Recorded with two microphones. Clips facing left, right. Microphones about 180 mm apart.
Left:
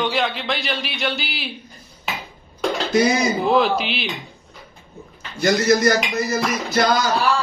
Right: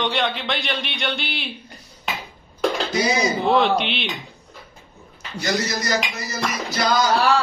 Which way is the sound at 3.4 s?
Centre (ahead or behind).